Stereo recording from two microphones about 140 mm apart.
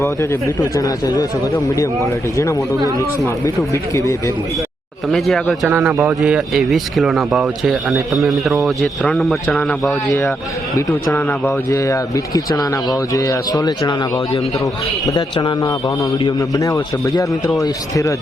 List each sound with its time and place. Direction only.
0.0 s a man's voice: 20° left (ahead or behind)
3.7 s a man's voice: 20° left (ahead or behind)
5.1 s speech: centre (ahead or behind)
5.6 s a man's voice: 10° right (ahead or behind)
10.8 s a man's voice: 15° left (ahead or behind)